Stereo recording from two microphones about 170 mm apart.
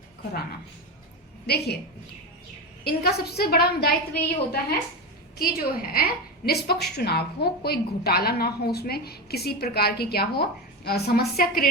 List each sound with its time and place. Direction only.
1.5 s a woman's voice: 75° left (ahead or behind)
2.8 s a woman's voice: 70° left (ahead or behind)